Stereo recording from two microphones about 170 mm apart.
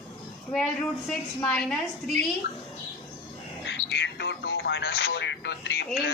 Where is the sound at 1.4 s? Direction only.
5° left (ahead or behind).